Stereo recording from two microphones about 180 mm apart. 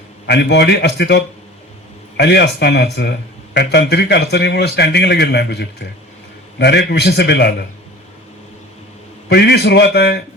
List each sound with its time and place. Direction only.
0.3 s speech: 70° left (ahead or behind)
9.3 s speech: 70° left (ahead or behind)